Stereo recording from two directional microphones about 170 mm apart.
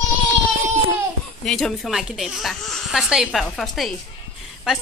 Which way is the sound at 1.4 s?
Centre (ahead or behind).